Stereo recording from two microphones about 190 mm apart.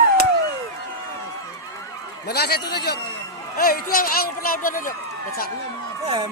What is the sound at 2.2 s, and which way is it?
A man's voice, 55° left (ahead or behind).